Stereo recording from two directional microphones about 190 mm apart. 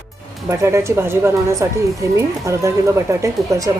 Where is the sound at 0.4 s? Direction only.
15° right (ahead or behind).